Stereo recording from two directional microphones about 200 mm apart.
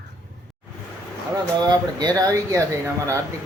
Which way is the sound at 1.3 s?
20° right (ahead or behind).